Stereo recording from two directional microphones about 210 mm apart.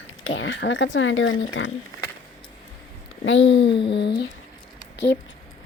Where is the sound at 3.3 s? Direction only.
60° left (ahead or behind).